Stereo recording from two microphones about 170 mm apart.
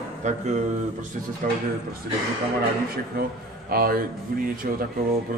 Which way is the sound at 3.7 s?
60° right (ahead or behind).